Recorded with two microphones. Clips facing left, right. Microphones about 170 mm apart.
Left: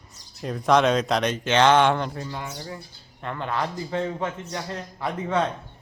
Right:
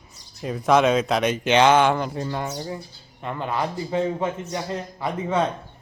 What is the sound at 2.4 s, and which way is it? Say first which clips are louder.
Speech: right 5 dB; 25° right (ahead or behind).